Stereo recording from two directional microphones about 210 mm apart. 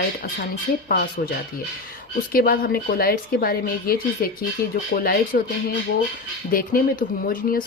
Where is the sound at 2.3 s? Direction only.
45° left (ahead or behind).